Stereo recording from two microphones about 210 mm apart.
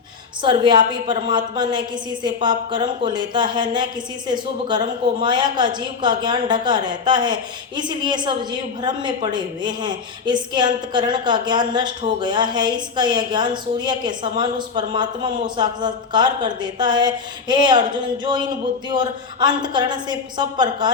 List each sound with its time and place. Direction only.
0.4 s a woman's voice: 25° right (ahead or behind)